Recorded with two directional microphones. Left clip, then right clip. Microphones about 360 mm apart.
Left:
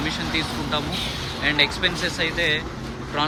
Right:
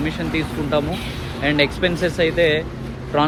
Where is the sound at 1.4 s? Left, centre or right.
Centre.